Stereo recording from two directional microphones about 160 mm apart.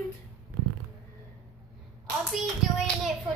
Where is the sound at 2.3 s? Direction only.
Centre (ahead or behind).